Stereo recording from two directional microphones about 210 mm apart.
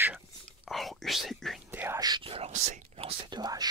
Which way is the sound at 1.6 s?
10° right (ahead or behind).